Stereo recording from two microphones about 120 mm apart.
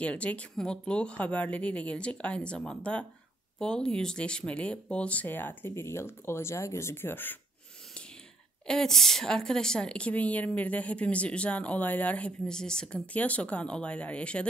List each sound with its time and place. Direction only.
0.0 s a woman's voice: 10° left (ahead or behind)
8.6 s a woman's voice: 5° left (ahead or behind)